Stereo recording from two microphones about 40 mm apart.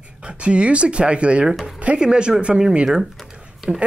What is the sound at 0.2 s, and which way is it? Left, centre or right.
Speech, right.